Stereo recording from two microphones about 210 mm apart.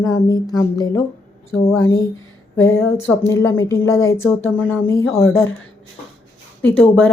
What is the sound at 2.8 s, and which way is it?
Speech, 10° left (ahead or behind).